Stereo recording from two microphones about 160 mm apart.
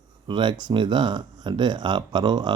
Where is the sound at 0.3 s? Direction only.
30° right (ahead or behind).